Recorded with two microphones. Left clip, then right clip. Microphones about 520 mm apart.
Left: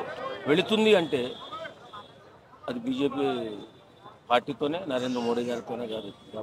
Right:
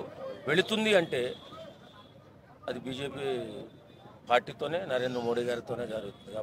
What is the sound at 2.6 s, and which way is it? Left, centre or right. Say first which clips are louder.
A man's voice: left 7 dB; right.